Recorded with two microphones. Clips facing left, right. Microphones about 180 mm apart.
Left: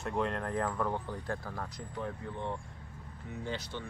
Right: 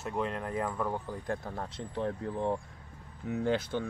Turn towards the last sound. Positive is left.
turn(degrees=-55)  # may be behind; listen again after turning